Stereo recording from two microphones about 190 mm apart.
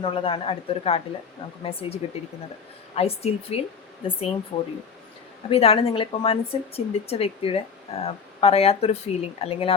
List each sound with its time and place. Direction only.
0.0 s speech: 25° left (ahead or behind)